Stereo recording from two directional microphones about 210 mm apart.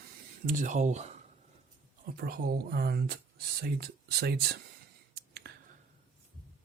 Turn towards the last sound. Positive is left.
turn(degrees=-50)  # may be behind; listen again after turning